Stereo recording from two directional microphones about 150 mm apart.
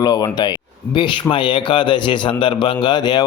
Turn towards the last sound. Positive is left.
turn(degrees=30)  # may be behind; listen again after turning